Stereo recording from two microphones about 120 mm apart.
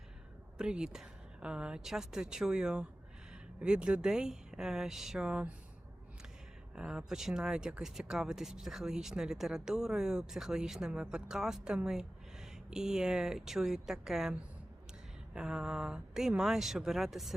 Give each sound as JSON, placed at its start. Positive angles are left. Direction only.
{"t": 0.6, "sound": "speech", "side_deg": -5}
{"t": 6.7, "sound": "speech", "side_deg": -5}